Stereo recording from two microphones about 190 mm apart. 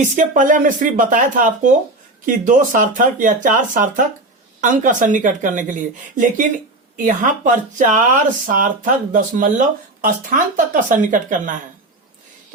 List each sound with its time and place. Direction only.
0.0 s speech: 45° right (ahead or behind)